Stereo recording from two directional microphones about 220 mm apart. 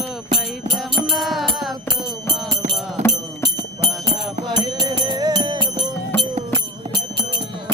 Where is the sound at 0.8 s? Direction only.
Centre (ahead or behind).